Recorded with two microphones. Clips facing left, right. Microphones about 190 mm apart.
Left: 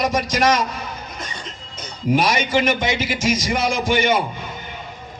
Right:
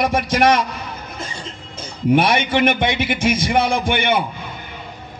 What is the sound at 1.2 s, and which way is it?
Music, 30° right (ahead or behind).